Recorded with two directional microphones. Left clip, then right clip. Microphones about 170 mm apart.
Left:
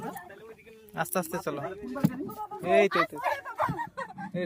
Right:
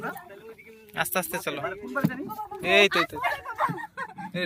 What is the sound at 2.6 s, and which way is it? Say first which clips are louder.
Speech: right 3 dB; 10° left (ahead or behind).